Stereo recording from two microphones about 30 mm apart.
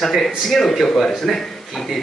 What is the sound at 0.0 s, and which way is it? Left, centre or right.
Speech, centre.